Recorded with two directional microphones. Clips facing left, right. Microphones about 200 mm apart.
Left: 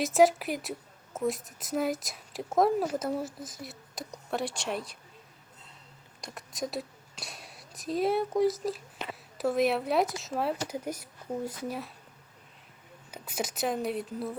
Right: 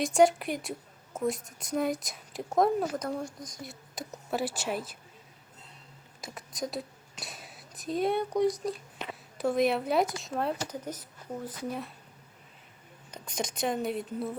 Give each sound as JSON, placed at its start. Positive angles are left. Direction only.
{"t": 0.0, "sound": "a woman's voice", "side_deg": 0}
{"t": 6.2, "sound": "a woman's voice", "side_deg": 0}
{"t": 13.1, "sound": "a woman's voice", "side_deg": 5}